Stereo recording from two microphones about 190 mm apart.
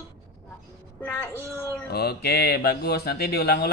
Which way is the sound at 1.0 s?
10° left (ahead or behind).